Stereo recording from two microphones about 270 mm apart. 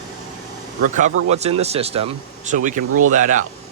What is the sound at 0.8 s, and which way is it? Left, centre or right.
Speech, right.